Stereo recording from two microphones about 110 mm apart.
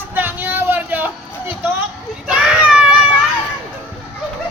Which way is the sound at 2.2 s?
10° right (ahead or behind).